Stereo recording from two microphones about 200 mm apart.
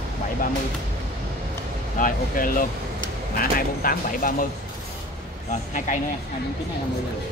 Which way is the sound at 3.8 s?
45° left (ahead or behind).